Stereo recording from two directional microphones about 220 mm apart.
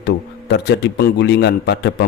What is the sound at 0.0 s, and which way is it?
A man's voice, 50° left (ahead or behind).